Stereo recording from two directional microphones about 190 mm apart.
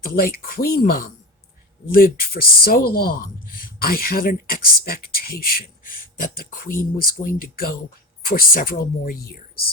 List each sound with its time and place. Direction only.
0.2 s speech: 50° left (ahead or behind)